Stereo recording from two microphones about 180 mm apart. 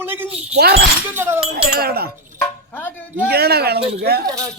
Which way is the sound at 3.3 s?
60° right (ahead or behind).